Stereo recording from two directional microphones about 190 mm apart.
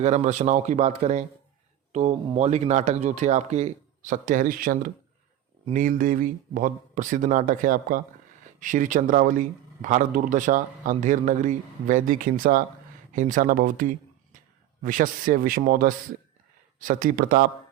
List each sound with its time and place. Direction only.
0.0 s a man's voice: 35° right (ahead or behind)